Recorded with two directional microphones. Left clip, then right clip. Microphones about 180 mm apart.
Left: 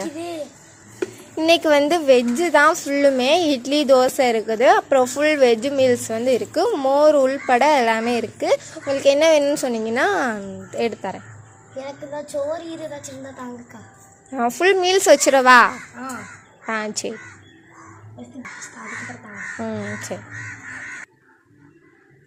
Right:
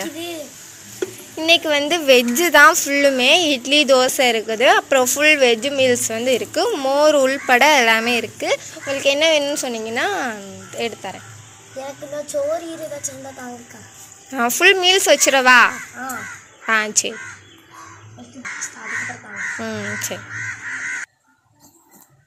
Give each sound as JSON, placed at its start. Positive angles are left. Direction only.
{"t": 0.9, "sound": "a sound", "side_deg": 40}
{"t": 2.3, "sound": "speech", "side_deg": 10}
{"t": 14.3, "sound": "speech", "side_deg": 15}
{"t": 19.5, "sound": "speech", "side_deg": 15}